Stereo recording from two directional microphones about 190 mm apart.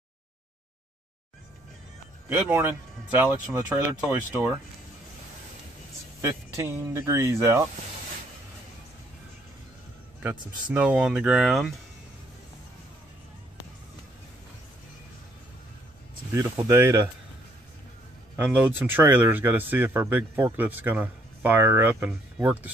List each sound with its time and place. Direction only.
2.2 s speech: 10° right (ahead or behind)
6.2 s speech: 15° right (ahead or behind)
10.7 s speech: 5° right (ahead or behind)
16.3 s speech: 15° right (ahead or behind)
18.4 s speech: 10° right (ahead or behind)